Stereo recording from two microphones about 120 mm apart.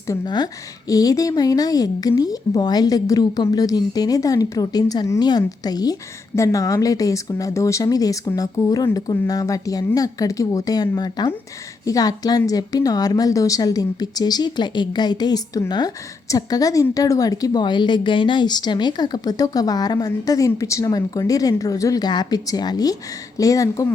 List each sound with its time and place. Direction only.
0.1 s a woman's voice: 35° left (ahead or behind)